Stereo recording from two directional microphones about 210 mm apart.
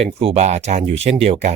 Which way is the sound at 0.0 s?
30° right (ahead or behind).